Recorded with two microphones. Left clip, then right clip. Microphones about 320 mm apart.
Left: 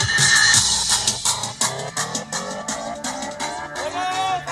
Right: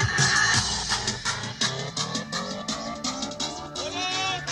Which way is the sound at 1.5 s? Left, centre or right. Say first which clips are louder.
Left 4 dB; left.